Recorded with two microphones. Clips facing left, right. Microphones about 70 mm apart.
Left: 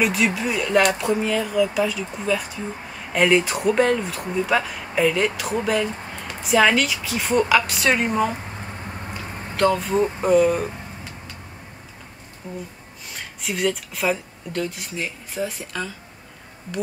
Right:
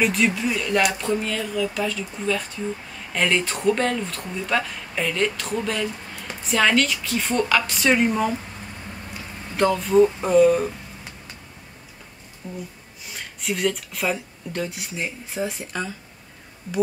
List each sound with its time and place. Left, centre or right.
0.0 s a woman's voice: centre
9.6 s a woman's voice: centre
12.4 s speech: left
13.0 s speech: centre
14.5 s speech: centre